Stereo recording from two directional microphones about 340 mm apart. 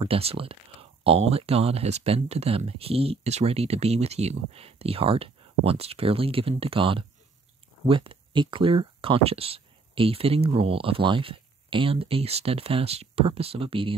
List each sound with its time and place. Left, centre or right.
0.0 s speech: centre